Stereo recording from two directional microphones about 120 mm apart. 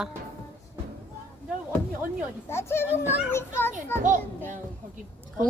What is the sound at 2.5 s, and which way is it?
A child's voice, 20° left (ahead or behind).